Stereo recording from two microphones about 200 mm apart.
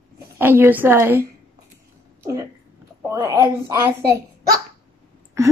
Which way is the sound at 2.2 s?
15° right (ahead or behind).